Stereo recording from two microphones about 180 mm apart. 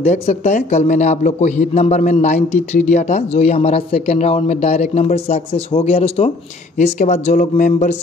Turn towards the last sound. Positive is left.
turn(degrees=40)  # may be behind; listen again after turning